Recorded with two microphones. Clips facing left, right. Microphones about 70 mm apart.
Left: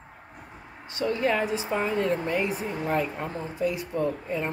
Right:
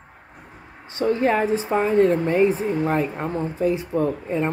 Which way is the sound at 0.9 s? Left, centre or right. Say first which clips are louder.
Right 5 dB; right.